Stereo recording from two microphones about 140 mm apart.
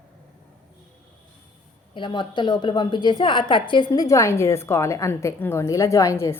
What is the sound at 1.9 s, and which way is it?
A woman's voice, 35° left (ahead or behind).